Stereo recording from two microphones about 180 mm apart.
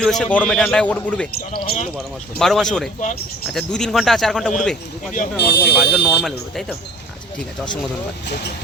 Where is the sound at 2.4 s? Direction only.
Centre (ahead or behind).